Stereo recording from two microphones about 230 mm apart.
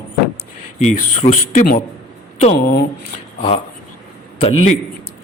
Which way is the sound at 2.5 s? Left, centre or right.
Left.